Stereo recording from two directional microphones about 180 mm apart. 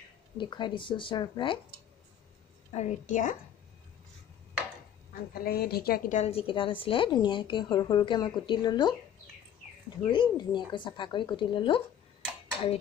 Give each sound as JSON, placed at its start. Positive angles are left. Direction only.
{"t": 0.4, "sound": "a woman's voice", "side_deg": 25}
{"t": 2.7, "sound": "a woman's voice", "side_deg": 40}
{"t": 5.4, "sound": "a woman's voice", "side_deg": 60}
{"t": 10.0, "sound": "a woman's voice", "side_deg": 25}